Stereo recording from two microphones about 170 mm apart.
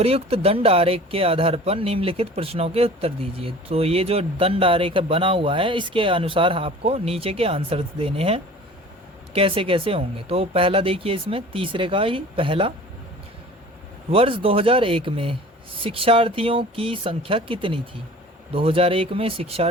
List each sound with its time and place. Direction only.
0.0 s speech: 35° right (ahead or behind)
14.1 s speech: 30° right (ahead or behind)